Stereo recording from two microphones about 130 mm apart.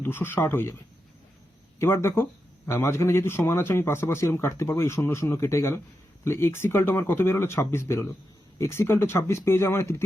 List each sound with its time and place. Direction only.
0.0 s speech: 15° left (ahead or behind)
1.8 s a man's voice: 20° left (ahead or behind)